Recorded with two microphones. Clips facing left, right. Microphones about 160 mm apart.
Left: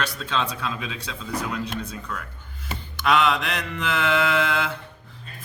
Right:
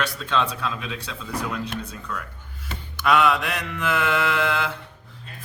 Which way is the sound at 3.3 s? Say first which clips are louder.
Right 1 dB; 5° right (ahead or behind).